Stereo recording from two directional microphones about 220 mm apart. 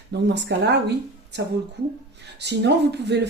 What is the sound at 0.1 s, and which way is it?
Speech, 50° right (ahead or behind).